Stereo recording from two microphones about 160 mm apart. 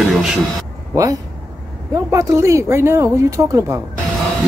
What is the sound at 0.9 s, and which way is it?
A woman's voice, 20° right (ahead or behind).